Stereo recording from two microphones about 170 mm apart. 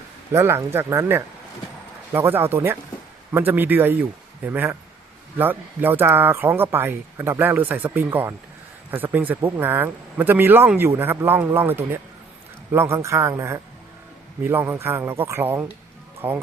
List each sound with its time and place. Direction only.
0.3 s speech: 15° right (ahead or behind)